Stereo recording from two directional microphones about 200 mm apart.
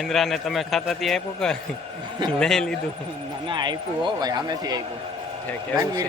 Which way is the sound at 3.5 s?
20° right (ahead or behind).